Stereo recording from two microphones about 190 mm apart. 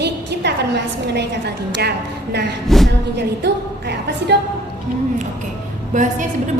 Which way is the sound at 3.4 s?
60° right (ahead or behind).